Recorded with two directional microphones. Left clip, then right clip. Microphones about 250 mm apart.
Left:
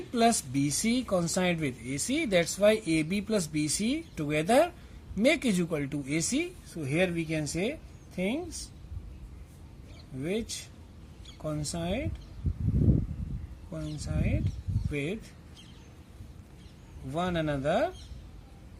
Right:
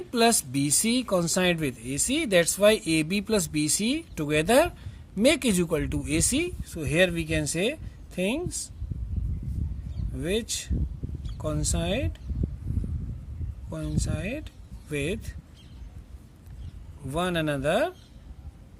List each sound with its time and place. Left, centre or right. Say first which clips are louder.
0.1 s speech: right 3 dB; right
10.2 s speech: right 5 dB; right
13.7 s speech: right 5 dB; right
17.1 s speech: right 3 dB; right